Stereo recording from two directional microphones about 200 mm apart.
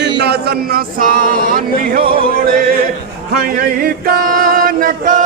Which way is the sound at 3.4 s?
45° right (ahead or behind).